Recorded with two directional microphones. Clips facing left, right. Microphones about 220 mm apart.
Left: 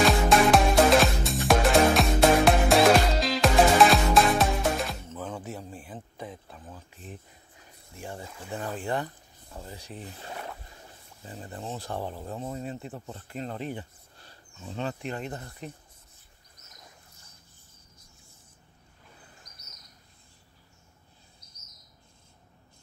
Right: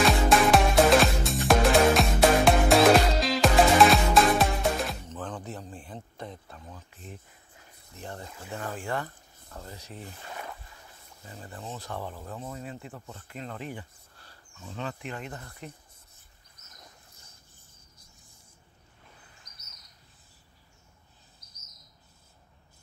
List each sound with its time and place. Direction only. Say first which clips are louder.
0.0 s music: left 1 dB; centre (ahead or behind)
7.9 s speech: left 1 dB; 10° left (ahead or behind)
8.5 s speech: left 2 dB; 20° left (ahead or behind)
11.2 s speech: left 3 dB; 35° left (ahead or behind)